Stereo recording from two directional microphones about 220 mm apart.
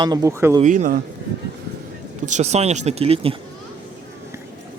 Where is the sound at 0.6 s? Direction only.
35° right (ahead or behind).